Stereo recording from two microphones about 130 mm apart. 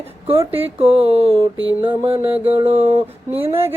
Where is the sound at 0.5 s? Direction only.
45° right (ahead or behind).